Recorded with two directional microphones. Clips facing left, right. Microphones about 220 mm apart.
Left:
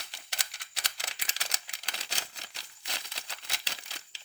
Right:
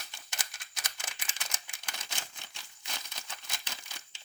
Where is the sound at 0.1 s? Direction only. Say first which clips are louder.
Even; 35° left (ahead or behind).